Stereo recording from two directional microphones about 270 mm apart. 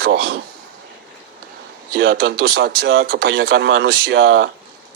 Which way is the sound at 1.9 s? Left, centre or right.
Right.